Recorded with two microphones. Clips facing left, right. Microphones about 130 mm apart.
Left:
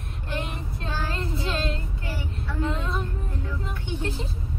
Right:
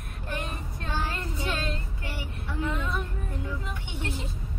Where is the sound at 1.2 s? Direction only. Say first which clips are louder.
Left 3 dB; 25° left (ahead or behind).